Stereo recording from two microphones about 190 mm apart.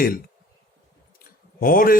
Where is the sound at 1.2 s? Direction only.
50° left (ahead or behind).